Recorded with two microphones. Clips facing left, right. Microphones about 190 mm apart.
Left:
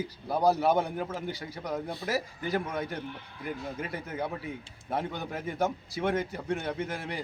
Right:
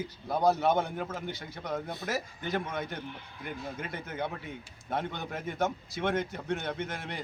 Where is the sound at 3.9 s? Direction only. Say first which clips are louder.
Left 2 dB; 35° left (ahead or behind).